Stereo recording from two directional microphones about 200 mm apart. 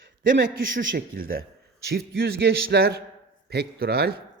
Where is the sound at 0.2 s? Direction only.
45° right (ahead or behind).